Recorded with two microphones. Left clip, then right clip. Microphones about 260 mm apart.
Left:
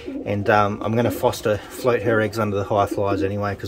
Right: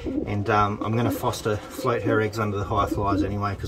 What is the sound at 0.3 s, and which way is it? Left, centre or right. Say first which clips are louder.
Speech: left 5 dB; centre.